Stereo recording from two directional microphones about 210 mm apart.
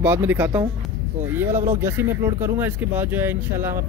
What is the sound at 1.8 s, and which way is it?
Speech, 10° right (ahead or behind).